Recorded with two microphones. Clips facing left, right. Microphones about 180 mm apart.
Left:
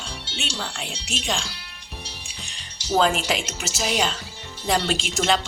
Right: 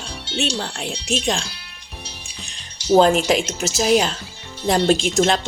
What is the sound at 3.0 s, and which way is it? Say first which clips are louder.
A woman's voice: right 5 dB; 45° right (ahead or behind).